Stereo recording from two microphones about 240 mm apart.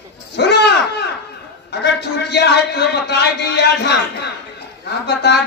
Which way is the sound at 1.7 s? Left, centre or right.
Left.